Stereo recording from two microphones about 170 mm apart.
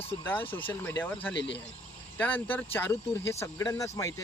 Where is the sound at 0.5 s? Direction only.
10° left (ahead or behind).